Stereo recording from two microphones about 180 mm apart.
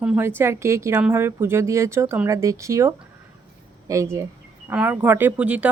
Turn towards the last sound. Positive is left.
turn(degrees=-5)  # may be behind; listen again after turning